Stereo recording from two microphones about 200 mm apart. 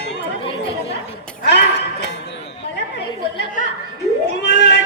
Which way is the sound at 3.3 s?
40° left (ahead or behind).